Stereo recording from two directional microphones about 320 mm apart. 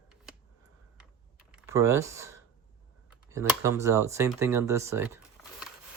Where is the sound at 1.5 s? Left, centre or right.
Centre.